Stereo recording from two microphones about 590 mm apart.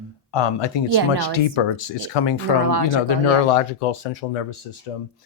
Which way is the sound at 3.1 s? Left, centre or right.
Left.